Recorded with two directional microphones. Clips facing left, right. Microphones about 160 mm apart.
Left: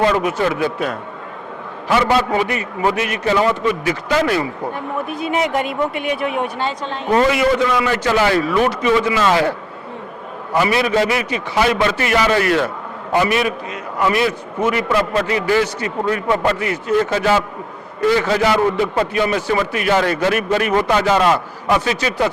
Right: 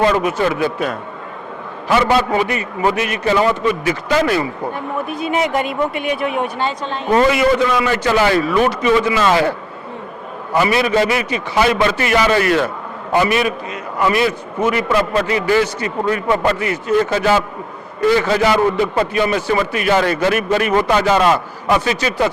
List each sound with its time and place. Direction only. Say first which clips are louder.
0.0 s a man's voice: right 1 dB; 15° right (ahead or behind)